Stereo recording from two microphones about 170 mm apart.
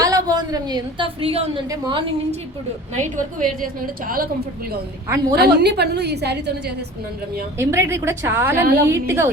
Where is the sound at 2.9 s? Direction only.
45° right (ahead or behind).